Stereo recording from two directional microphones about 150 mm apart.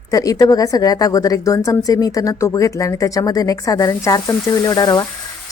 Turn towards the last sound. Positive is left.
turn(degrees=25)  # may be behind; listen again after turning